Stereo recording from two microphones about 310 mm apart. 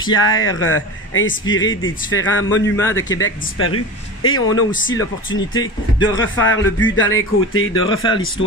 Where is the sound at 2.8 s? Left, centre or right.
Centre.